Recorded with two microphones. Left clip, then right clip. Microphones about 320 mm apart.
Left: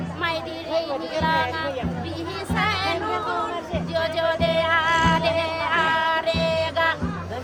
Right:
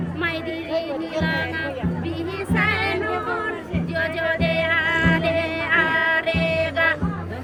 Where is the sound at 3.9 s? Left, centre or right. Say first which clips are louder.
Even; centre.